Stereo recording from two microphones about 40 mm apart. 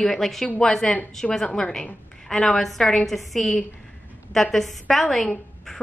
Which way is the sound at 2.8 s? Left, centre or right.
Left.